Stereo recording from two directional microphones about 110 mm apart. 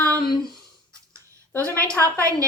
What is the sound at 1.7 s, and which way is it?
Speech, 10° left (ahead or behind).